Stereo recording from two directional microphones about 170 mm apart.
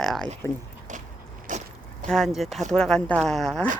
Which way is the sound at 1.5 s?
50° right (ahead or behind).